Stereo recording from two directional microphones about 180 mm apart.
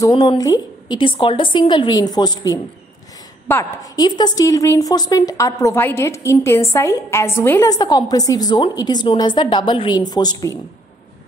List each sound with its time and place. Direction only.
0.0 s a woman's voice: 25° left (ahead or behind)